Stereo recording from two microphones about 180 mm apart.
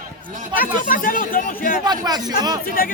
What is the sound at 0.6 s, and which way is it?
Speech, 50° left (ahead or behind).